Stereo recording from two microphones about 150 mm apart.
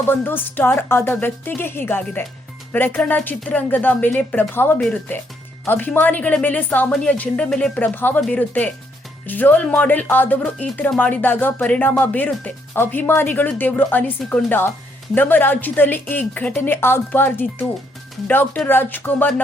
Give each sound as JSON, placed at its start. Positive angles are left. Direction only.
{"t": 0.1, "sound": "speech", "side_deg": 15}